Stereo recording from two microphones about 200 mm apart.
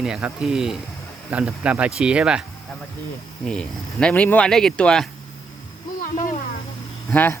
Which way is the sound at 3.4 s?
5° left (ahead or behind).